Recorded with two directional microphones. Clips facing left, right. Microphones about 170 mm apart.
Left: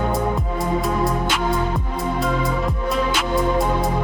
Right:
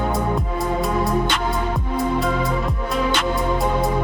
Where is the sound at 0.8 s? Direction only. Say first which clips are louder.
Right 1 dB; 5° left (ahead or behind).